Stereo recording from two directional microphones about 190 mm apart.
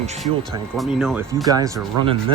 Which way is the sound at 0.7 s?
Centre (ahead or behind).